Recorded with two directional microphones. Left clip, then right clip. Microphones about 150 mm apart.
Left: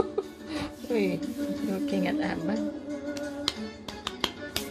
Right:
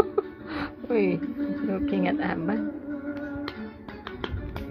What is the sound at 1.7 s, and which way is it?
Speech, 25° right (ahead or behind).